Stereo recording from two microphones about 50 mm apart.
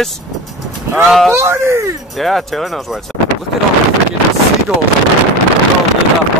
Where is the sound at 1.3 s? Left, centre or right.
Right.